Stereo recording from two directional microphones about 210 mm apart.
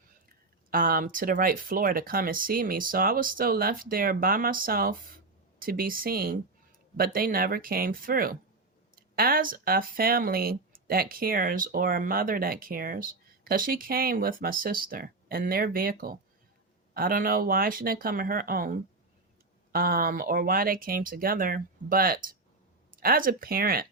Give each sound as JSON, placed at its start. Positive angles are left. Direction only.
{"t": 0.7, "sound": "speech", "side_deg": -40}